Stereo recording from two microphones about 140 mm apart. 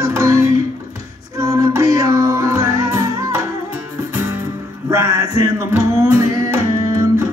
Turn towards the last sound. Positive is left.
turn(degrees=-20)  # may be behind; listen again after turning